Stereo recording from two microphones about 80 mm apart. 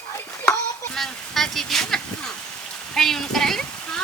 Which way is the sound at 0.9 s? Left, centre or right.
Centre.